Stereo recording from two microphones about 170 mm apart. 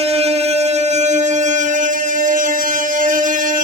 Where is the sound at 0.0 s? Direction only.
35° right (ahead or behind).